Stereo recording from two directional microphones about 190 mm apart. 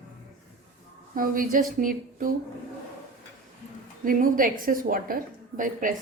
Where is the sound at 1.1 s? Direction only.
45° right (ahead or behind).